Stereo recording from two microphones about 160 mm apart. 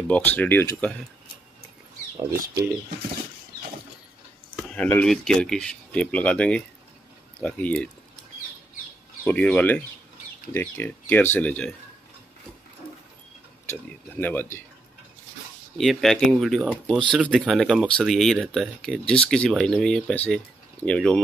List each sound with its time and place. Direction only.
0.1 s speech: 10° left (ahead or behind)
2.1 s speech: 20° right (ahead or behind)
4.6 s speech: 5° left (ahead or behind)
9.2 s speech: 10° left (ahead or behind)
13.7 s speech: 10° left (ahead or behind)
15.8 s speech: centre (ahead or behind)